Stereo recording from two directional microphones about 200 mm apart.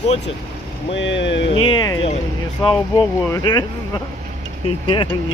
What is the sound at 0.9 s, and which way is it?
Speech, 65° left (ahead or behind).